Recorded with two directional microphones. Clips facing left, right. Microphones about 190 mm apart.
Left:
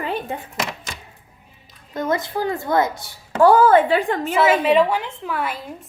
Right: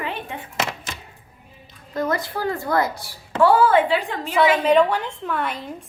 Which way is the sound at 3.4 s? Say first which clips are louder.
Left 3 dB; 45° left (ahead or behind).